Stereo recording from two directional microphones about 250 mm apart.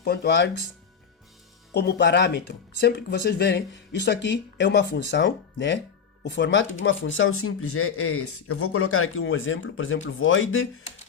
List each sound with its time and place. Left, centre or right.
0.0 s speech: left
1.7 s speech: left